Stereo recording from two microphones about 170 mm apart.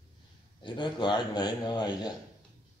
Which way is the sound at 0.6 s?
25° left (ahead or behind).